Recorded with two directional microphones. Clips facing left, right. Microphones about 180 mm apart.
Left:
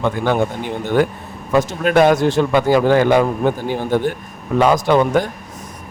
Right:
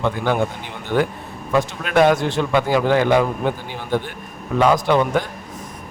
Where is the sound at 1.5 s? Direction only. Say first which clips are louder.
Left 3 dB; 40° left (ahead or behind).